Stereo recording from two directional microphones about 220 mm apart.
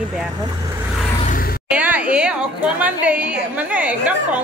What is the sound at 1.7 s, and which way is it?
A woman's voice, 5° right (ahead or behind).